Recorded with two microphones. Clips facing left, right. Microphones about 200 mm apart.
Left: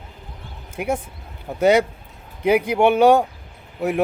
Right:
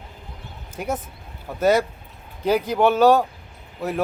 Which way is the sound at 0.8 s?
10° left (ahead or behind).